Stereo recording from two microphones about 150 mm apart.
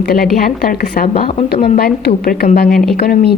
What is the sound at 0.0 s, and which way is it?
A woman's voice, 85° left.